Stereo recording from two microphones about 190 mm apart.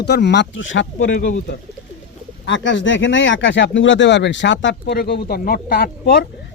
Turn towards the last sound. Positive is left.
turn(degrees=55)  # may be behind; listen again after turning